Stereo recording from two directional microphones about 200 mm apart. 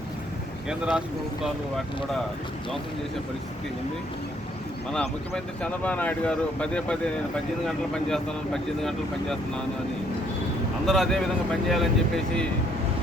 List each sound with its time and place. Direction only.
0.7 s speech: 5° right (ahead or behind)
4.9 s speech: 5° left (ahead or behind)
8.1 s speech: centre (ahead or behind)
10.8 s speech: centre (ahead or behind)